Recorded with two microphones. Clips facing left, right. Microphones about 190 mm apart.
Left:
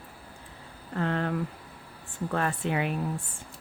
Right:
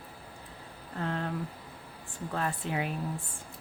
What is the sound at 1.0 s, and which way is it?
Speech, 75° left (ahead or behind).